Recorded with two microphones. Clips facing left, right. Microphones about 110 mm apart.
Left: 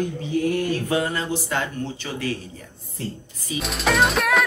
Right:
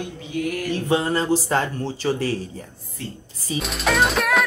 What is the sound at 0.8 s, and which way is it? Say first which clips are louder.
Speech: right 3 dB; 30° right (ahead or behind).